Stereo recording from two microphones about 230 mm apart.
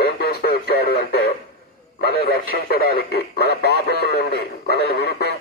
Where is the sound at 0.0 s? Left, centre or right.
Left.